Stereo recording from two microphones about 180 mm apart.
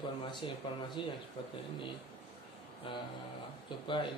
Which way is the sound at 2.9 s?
30° left (ahead or behind).